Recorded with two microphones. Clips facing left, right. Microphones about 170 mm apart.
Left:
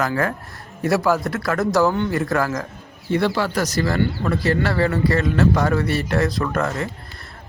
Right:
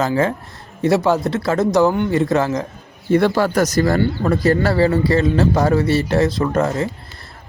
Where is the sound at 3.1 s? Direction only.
45° right (ahead or behind).